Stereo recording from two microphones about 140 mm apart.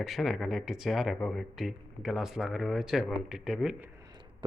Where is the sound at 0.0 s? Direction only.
Centre (ahead or behind).